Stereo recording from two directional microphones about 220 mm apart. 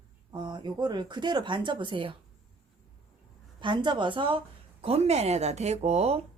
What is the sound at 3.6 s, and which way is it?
Speech, 20° right (ahead or behind).